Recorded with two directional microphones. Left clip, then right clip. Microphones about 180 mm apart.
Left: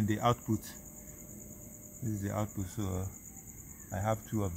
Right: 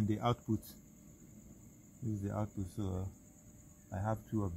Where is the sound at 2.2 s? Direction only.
25° right (ahead or behind).